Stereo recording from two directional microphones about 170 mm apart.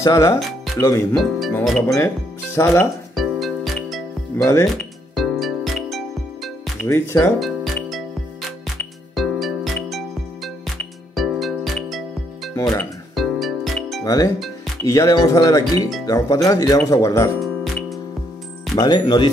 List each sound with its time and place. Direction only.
0.0 s speech: 20° left (ahead or behind)
1.1 s speech: centre (ahead or behind)
2.5 s speech: 15° left (ahead or behind)
3.2 s music: centre (ahead or behind)
6.9 s speech: 20° left (ahead or behind)
7.3 s music: centre (ahead or behind)
12.5 s music: 20° left (ahead or behind)
13.1 s music: centre (ahead or behind)
14.0 s speech: 20° left (ahead or behind)
17.4 s music: centre (ahead or behind)
18.8 s speech: 25° left (ahead or behind)